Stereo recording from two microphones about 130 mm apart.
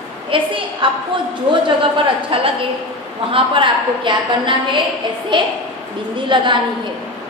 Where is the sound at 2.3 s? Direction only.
45° right (ahead or behind).